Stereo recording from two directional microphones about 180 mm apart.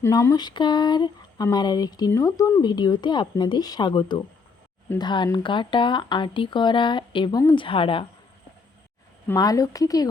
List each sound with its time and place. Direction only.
0.0 s speech: 15° left (ahead or behind)
9.2 s speech: 20° left (ahead or behind)